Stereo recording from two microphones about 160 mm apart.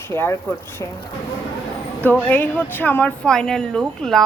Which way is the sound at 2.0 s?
10° left (ahead or behind).